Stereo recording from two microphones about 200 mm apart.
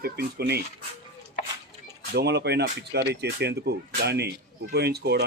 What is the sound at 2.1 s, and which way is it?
Speech, 55° right (ahead or behind).